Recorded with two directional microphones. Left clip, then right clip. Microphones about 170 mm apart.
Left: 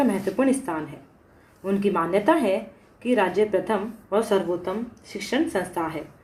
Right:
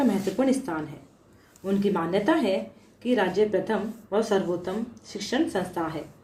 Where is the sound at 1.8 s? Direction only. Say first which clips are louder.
Left 3 dB; 20° right (ahead or behind).